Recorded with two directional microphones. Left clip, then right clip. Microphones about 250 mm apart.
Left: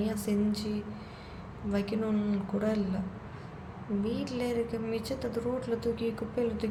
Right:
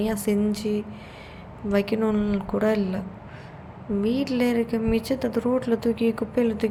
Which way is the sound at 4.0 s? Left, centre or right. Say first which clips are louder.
Right 10 dB; right.